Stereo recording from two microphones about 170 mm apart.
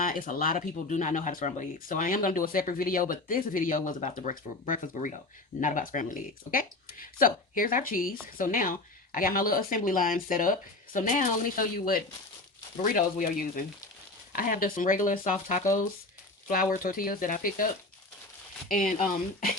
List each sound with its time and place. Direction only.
0.0 s speech: 55° left (ahead or behind)
18.7 s speech: 55° left (ahead or behind)